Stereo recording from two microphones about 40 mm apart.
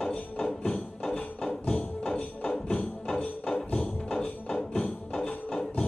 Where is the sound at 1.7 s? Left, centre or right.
Left.